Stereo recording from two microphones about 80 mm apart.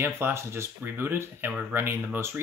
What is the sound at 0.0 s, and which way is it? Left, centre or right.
Speech, right.